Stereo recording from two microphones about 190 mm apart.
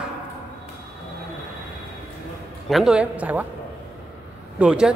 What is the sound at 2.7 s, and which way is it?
Speech, 5° right (ahead or behind).